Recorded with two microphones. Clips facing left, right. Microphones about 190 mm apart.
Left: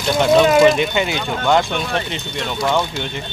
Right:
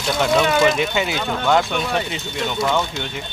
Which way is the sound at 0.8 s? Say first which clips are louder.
Left 2 dB; centre (ahead or behind).